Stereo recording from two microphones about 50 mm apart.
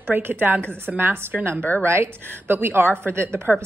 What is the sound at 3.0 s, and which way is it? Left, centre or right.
Speech, right.